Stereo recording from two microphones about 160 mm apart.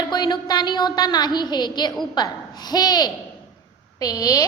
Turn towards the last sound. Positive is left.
turn(degrees=25)  # may be behind; listen again after turning